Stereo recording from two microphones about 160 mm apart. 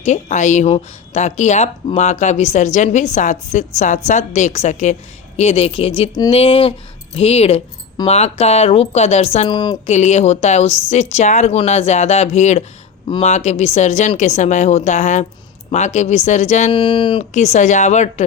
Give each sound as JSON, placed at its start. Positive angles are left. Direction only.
{"t": 0.0, "sound": "speech", "side_deg": 45}
{"t": 9.5, "sound": "speech", "side_deg": 30}
{"t": 9.8, "sound": "speech", "side_deg": 45}
{"t": 16.7, "sound": "speech", "side_deg": 30}
{"t": 17.3, "sound": "speech", "side_deg": 45}